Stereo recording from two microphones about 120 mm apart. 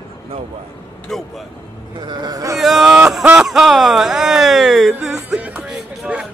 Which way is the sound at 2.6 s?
5° right (ahead or behind).